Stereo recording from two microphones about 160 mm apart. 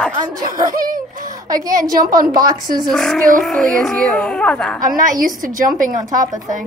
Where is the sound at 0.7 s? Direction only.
60° right (ahead or behind).